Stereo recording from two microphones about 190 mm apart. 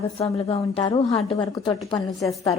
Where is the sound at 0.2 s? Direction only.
30° left (ahead or behind).